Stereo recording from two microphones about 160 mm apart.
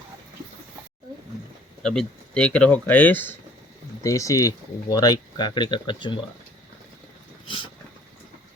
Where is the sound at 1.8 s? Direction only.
5° left (ahead or behind); by 6.2 s 30° left (ahead or behind).